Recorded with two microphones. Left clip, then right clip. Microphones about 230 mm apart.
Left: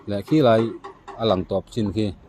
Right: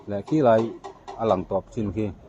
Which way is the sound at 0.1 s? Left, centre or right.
Left.